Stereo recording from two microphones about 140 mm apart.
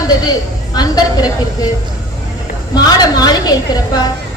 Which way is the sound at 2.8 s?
30° left (ahead or behind).